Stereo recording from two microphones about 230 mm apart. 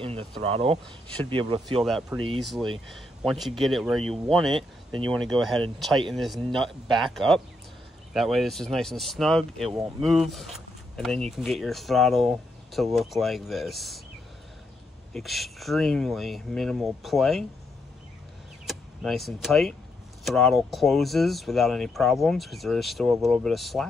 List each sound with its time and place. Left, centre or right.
0.0 s speech: right
1.7 s speech: centre
15.1 s speech: centre
18.7 s speech: centre